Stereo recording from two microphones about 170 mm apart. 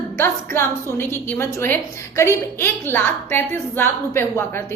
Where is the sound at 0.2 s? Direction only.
15° left (ahead or behind).